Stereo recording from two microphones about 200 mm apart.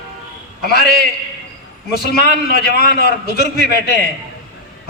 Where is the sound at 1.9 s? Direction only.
50° left (ahead or behind).